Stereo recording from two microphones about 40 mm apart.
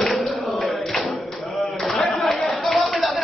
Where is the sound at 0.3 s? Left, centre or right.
Centre.